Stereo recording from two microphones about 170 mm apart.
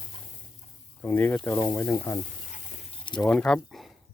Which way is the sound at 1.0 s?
10° left (ahead or behind).